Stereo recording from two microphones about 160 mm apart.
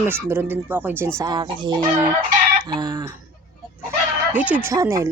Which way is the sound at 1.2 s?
25° right (ahead or behind).